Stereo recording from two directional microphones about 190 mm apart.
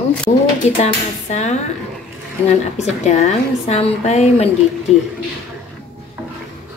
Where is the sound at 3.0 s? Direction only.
35° left (ahead or behind).